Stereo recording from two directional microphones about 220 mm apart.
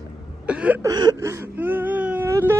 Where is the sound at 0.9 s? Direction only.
20° right (ahead or behind).